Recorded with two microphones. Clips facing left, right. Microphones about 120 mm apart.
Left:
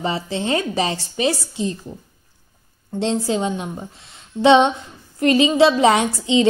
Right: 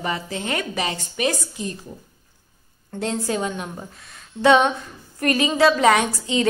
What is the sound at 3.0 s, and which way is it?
A woman's voice, 25° left (ahead or behind).